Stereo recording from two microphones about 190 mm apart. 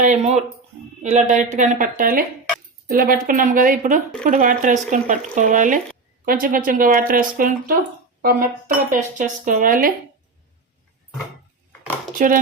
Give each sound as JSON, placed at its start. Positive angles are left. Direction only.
{"t": 0.0, "sound": "speech", "side_deg": -35}
{"t": 12.2, "sound": "speech", "side_deg": -45}